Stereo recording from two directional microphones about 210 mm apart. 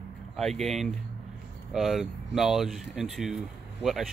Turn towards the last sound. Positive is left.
turn(degrees=0)  # may be behind; listen again after turning